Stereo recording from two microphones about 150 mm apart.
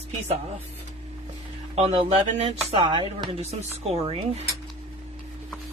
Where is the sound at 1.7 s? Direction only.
40° right (ahead or behind).